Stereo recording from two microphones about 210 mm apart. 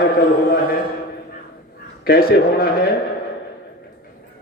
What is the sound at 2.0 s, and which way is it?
Speech, 50° left (ahead or behind).